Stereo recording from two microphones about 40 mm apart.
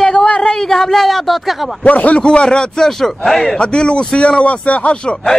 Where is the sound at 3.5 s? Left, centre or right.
Left.